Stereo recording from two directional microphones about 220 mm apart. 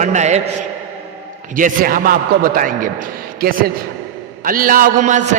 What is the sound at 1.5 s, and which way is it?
Chant, 40° right (ahead or behind).